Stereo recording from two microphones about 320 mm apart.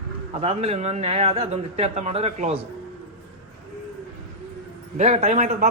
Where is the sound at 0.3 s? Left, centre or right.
Centre.